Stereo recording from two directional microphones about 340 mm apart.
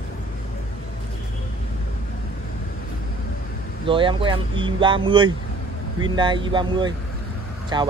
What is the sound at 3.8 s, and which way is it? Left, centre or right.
Speech, centre.